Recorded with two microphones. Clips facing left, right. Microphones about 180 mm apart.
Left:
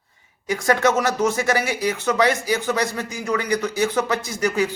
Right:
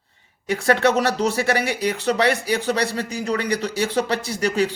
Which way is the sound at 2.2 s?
65° right (ahead or behind).